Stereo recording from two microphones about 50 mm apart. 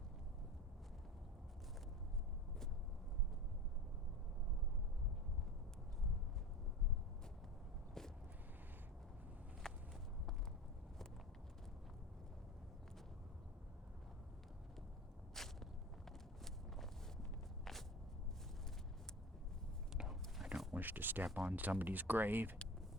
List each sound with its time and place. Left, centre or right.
9.6 s walk: centre
15.3 s walk: centre
20.0 s a sound: centre
20.7 s speech: right